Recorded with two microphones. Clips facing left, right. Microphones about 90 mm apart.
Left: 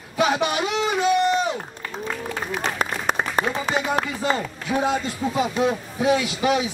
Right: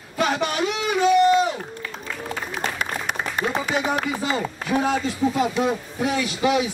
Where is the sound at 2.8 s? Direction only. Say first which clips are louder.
Left 3 dB; 40° left (ahead or behind).